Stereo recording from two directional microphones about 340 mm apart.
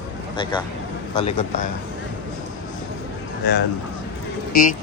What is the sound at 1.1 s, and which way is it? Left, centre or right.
Speech, centre.